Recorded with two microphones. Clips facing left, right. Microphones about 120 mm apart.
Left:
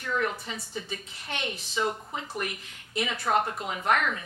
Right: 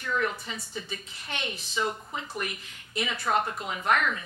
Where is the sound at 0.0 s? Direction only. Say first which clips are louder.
Even; 40° left (ahead or behind); by 1.8 s 60° left (ahead or behind).